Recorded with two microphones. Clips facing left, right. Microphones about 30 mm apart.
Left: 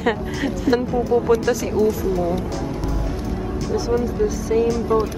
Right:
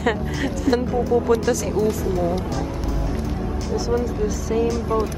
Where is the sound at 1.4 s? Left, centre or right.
Centre.